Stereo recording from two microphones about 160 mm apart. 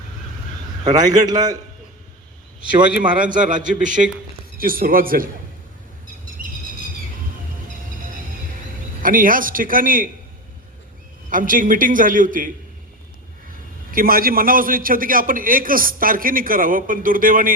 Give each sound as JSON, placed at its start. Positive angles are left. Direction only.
{"t": 0.9, "sound": "a man's voice", "side_deg": -25}
{"t": 3.2, "sound": "a man's voice", "side_deg": -55}
{"t": 4.5, "sound": "a man's voice", "side_deg": -65}
{"t": 9.0, "sound": "a man's voice", "side_deg": -60}
{"t": 11.3, "sound": "a man's voice", "side_deg": -55}
{"t": 13.9, "sound": "a man's voice", "side_deg": -65}